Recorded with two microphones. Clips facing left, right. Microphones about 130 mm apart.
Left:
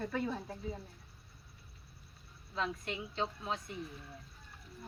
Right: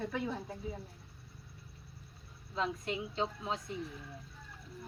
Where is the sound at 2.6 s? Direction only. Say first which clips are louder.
Right 2 dB; 25° right (ahead or behind).